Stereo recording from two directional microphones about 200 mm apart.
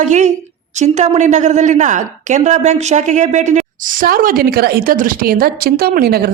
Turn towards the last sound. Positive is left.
turn(degrees=-50)  # may be behind; listen again after turning